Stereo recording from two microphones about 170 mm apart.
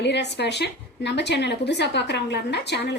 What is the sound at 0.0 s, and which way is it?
A woman's voice, 90° left.